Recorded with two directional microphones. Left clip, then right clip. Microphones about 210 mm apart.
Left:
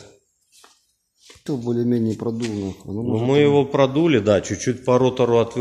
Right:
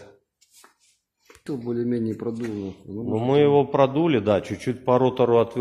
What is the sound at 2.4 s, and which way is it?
A man's voice, centre (ahead or behind).